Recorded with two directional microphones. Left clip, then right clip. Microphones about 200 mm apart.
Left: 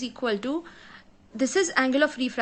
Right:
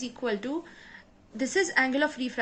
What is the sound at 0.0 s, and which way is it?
A woman's voice, 30° left (ahead or behind).